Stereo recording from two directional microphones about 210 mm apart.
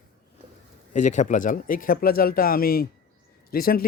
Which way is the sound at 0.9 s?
35° left (ahead or behind).